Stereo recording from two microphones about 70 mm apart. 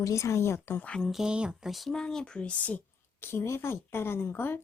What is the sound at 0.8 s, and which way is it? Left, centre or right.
Speech, centre.